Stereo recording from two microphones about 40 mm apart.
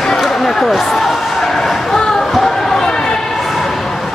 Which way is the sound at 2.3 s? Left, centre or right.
Centre.